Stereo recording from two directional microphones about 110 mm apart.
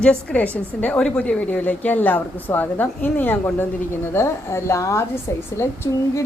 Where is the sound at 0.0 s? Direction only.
10° left (ahead or behind).